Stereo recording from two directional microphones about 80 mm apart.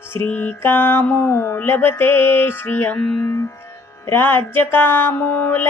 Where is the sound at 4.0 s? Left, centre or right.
Left.